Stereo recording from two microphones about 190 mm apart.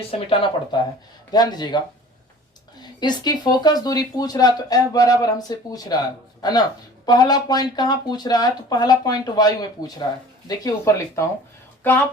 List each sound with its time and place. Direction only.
0.3 s speech: 25° left (ahead or behind)
2.8 s speech: 20° left (ahead or behind)